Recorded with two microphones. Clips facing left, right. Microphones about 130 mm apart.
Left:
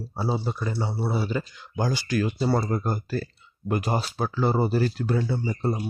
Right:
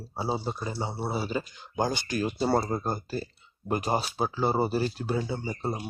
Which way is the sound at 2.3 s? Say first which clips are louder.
Right 3 dB; 35° right (ahead or behind).